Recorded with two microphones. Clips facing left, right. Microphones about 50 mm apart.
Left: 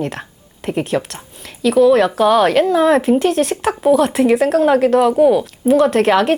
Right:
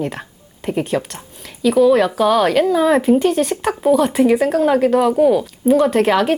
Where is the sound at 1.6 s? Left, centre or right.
Centre.